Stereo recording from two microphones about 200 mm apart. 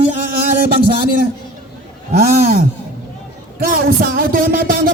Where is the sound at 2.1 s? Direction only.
50° right (ahead or behind).